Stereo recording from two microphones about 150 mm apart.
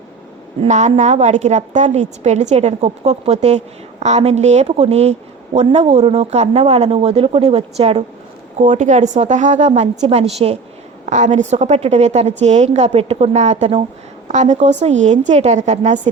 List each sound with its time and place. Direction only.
0.6 s a woman's voice: 50° right (ahead or behind)